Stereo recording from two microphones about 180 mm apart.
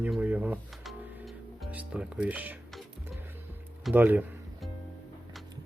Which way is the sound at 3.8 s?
10° right (ahead or behind).